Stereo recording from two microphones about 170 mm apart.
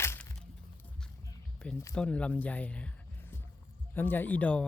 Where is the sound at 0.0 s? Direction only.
15° left (ahead or behind).